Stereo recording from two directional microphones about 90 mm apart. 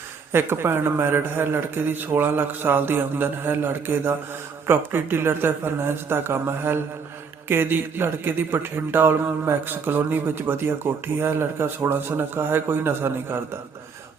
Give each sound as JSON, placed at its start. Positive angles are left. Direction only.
{"t": 0.3, "sound": "speech", "side_deg": -25}